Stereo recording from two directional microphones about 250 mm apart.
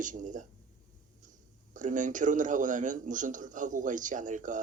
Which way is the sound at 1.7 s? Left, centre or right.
Right.